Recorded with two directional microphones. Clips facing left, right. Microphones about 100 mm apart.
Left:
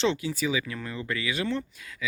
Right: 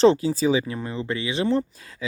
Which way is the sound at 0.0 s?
35° right (ahead or behind).